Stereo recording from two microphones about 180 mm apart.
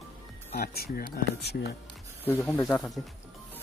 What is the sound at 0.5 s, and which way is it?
Speech, 60° left (ahead or behind).